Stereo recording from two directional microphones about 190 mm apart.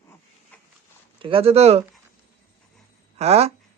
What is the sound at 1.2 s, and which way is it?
Speech, 30° right (ahead or behind).